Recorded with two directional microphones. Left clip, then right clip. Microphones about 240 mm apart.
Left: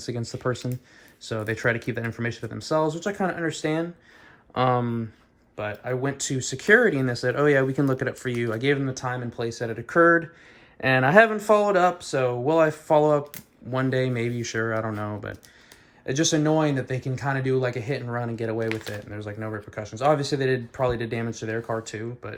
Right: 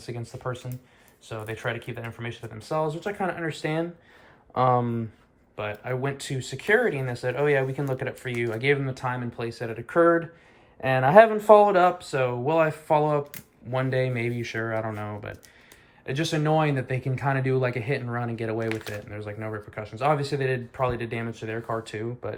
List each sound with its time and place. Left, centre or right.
0.1 s speech: left
1.8 s speech: left
2.3 s speech: centre
21.9 s speech: centre